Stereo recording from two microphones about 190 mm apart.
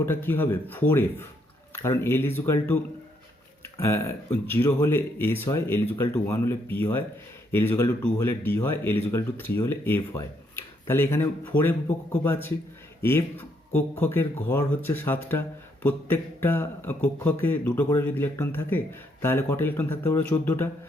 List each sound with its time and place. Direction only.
0.0 s speech: 10° left (ahead or behind)